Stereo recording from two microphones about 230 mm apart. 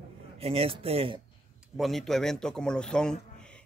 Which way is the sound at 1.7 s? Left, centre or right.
Centre.